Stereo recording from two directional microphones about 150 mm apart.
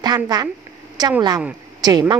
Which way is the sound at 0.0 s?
25° right (ahead or behind).